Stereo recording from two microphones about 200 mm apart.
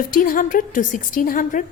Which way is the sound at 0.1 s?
45° left (ahead or behind).